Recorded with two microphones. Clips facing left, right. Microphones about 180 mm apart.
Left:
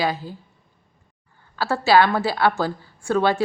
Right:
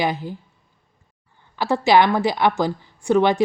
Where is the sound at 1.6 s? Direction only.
20° right (ahead or behind).